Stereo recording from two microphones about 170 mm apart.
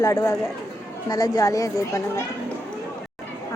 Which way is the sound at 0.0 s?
20° left (ahead or behind).